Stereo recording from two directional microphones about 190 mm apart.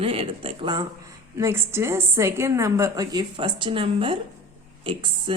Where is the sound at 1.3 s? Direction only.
15° right (ahead or behind).